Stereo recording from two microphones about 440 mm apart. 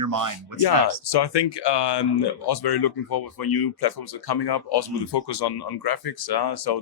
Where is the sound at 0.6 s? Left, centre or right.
Left.